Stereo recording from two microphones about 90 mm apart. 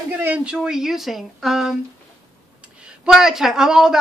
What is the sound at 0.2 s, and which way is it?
Speech, 15° right (ahead or behind).